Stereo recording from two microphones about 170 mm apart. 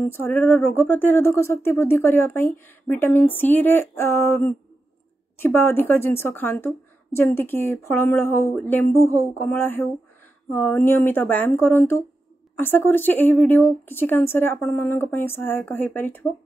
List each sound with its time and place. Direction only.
0.0 s speech: 10° left (ahead or behind)